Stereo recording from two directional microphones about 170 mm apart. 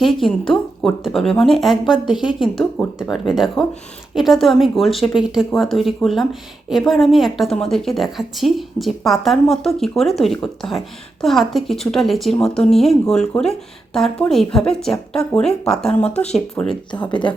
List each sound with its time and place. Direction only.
0.0 s a woman's voice: centre (ahead or behind)
17.1 s speech: 30° left (ahead or behind)